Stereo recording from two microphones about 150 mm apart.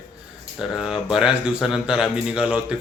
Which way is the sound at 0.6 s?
5° right (ahead or behind).